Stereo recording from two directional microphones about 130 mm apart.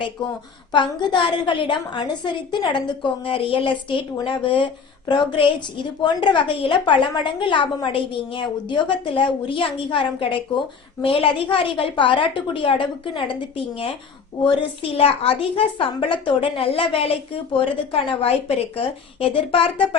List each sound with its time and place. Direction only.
0.7 s a woman's voice: 35° left (ahead or behind)